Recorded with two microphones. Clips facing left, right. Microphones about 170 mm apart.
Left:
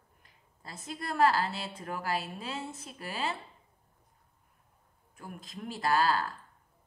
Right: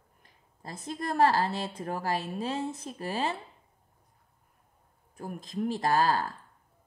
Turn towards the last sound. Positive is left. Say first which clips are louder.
# right 2 dB
turn(degrees=-45)  # may be behind; listen again after turning